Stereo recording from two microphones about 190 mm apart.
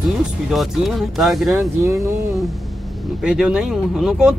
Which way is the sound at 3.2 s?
5° right (ahead or behind).